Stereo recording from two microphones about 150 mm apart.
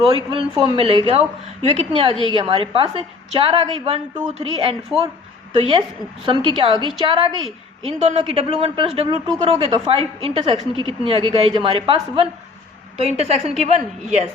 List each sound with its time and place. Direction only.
0.3 s a woman's voice: 30° right (ahead or behind)
4.9 s a woman's voice: 5° right (ahead or behind)
5.5 s a woman's voice: 35° right (ahead or behind)
7.9 s a woman's voice: 45° right (ahead or behind)